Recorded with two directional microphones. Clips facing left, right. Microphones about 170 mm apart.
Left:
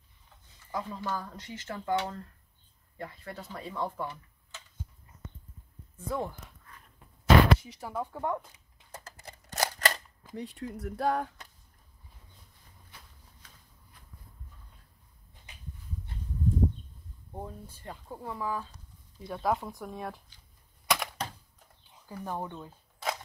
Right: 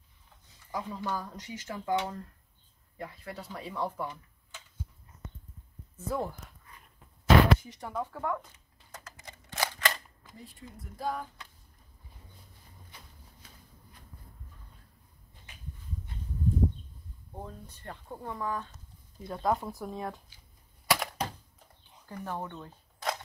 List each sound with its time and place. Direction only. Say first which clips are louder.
0.7 s speech: even; 10° right (ahead or behind)
5.9 s dog: right 1 dB; 5° right (ahead or behind)
7.5 s speech: even; centre (ahead or behind)
8.1 s camera: left 1 dB; 20° left (ahead or behind); by 10.0 s 40° left (ahead or behind)
10.3 s speech: left 11 dB; 80° left
17.4 s speech: left 2 dB; 10° left (ahead or behind)
20.8 s typewriter: right 2 dB; 5° right (ahead or behind)
22.0 s speech: left 1 dB; 10° left (ahead or behind)